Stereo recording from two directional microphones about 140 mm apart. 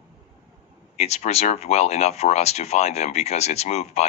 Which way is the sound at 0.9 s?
50° left (ahead or behind).